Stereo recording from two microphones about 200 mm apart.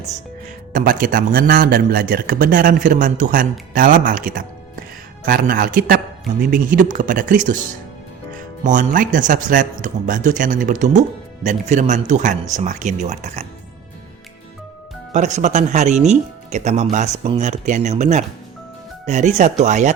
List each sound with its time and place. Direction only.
0.7 s a man's voice: 40° right (ahead or behind)
8.6 s speech: 40° right (ahead or behind)
15.1 s speech: 35° right (ahead or behind)